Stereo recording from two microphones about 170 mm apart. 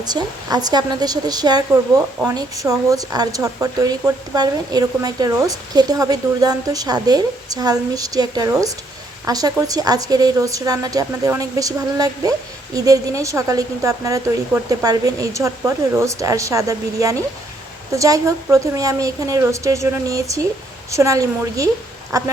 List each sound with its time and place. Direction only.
0.0 s a woman's voice: 25° right (ahead or behind)